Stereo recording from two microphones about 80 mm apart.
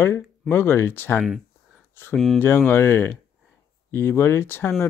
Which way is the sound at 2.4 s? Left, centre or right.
Left.